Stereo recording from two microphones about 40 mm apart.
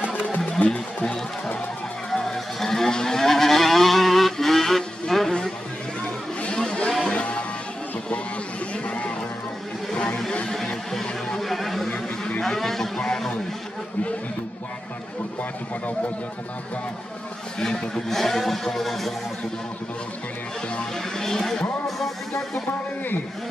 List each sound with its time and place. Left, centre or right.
0.6 s speech: left
2.0 s a sound: centre
6.5 s music: centre
7.1 s music: left
8.7 s a sound: left
10.9 s a sound: centre
17.6 s speech: centre
20.9 s vehicle: centre
21.8 s music: centre